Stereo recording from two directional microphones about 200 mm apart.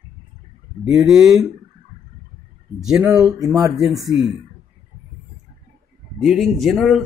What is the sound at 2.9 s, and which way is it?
Speech, 5° right (ahead or behind).